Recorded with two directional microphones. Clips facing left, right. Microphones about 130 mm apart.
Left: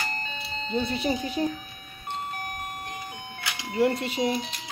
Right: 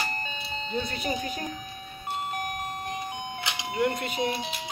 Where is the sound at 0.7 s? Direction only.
25° left (ahead or behind).